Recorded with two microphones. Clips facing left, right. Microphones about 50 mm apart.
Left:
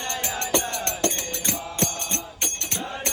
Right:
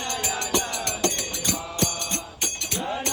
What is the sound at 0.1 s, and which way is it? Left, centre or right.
Music, left.